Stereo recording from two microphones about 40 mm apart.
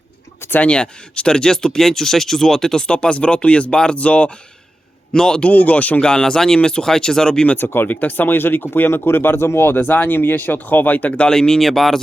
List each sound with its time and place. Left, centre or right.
0.6 s speech: left; by 2.8 s centre
2.8 s speech: left
5.1 s speech: centre
5.4 s speech: left
6.0 s speech: centre
6.8 s speech: centre
7.6 s speech: left
7.9 s speech: left
11.1 s speech: left
11.3 s speech: centre
11.6 s speech: centre